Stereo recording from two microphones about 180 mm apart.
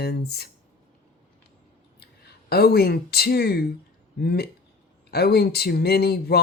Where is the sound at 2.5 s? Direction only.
60° left (ahead or behind).